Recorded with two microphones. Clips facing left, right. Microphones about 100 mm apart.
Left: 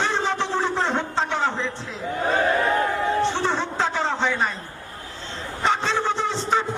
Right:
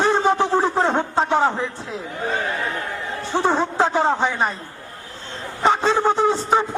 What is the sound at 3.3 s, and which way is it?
Speech, 45° right (ahead or behind).